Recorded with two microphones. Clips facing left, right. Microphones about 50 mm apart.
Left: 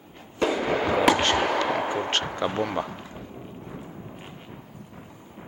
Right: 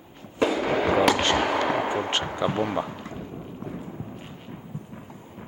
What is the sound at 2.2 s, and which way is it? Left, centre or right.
Speech, centre.